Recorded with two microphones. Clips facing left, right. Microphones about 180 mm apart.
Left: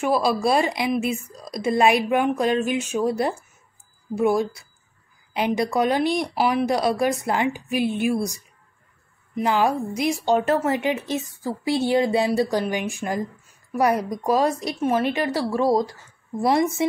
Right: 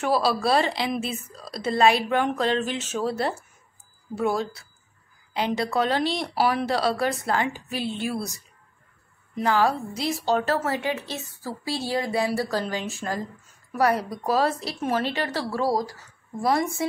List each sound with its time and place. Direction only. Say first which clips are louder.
0.0 s a woman's voice: left 2 dB; 10° left (ahead or behind)
9.4 s a woman's voice: left 1 dB; 15° left (ahead or behind)